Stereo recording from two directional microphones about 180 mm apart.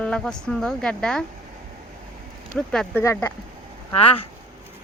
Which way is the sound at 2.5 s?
5° left (ahead or behind).